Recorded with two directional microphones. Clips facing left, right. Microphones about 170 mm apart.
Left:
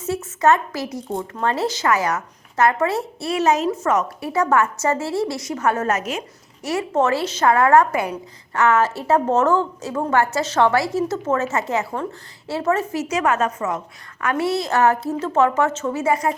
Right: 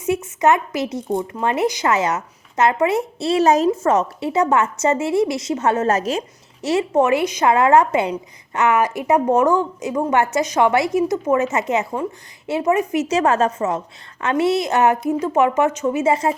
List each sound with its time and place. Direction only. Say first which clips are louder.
0.0 s a woman's voice: right 2 dB; 15° right (ahead or behind); by 3.8 s 35° right (ahead or behind)
3.8 s a woman's voice: right 3 dB; 25° right (ahead or behind)